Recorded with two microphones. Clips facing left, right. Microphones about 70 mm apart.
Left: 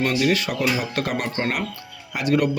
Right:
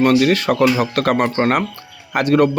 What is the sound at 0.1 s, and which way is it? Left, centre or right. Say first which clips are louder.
A man's voice: right 7 dB; right.